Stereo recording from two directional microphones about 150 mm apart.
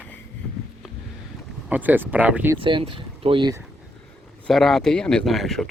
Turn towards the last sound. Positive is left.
turn(degrees=0)  # may be behind; listen again after turning